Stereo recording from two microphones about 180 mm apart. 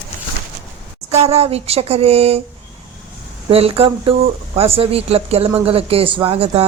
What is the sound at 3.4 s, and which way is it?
Speech, 30° right (ahead or behind).